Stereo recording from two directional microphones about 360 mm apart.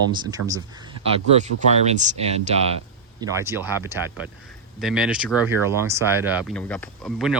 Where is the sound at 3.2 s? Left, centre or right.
Centre.